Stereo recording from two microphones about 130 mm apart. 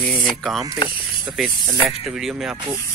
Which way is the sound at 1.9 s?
5° right (ahead or behind).